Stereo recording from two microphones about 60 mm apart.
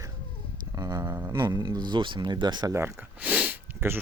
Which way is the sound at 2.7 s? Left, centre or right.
Right.